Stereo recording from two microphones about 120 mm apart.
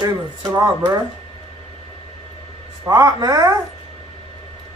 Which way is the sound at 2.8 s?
30° right (ahead or behind).